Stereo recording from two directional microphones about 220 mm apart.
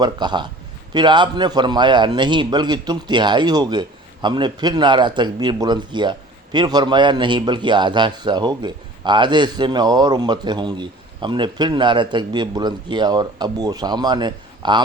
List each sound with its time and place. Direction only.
0.0 s a man's voice: 20° right (ahead or behind)